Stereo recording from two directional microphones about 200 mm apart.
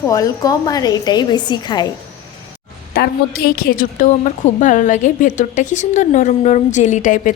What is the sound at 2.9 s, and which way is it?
A woman's voice, 50° left (ahead or behind).